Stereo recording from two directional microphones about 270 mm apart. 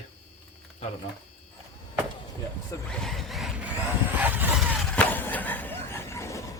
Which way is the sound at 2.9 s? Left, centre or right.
Centre.